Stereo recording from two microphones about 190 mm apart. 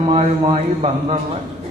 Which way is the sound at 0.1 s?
30° right (ahead or behind).